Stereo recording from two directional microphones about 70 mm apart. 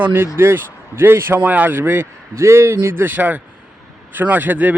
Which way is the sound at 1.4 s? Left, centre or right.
Right.